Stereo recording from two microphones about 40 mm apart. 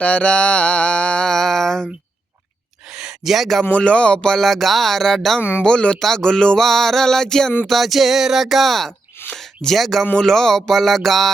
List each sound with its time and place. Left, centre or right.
0.0 s music: left
1.3 s a sound: centre
2.9 s gasp: centre
3.7 s speech: left
4.4 s music: centre
5.4 s speech: left
5.6 s speech: left
6.6 s music: centre
7.7 s speech: centre
9.2 s a sound: left
9.7 s speech: centre
10.2 s music: centre